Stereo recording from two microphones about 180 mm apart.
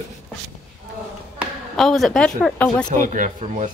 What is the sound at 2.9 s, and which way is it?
Speech, 45° right (ahead or behind).